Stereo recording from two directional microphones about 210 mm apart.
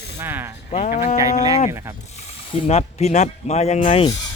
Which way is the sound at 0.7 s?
35° left (ahead or behind).